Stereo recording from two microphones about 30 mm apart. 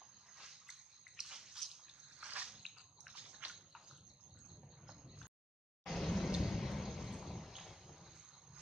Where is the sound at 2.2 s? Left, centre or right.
Right.